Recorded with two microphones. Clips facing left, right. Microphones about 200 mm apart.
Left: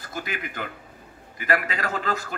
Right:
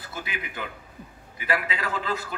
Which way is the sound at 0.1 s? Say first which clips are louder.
Left 3 dB; 45° left (ahead or behind).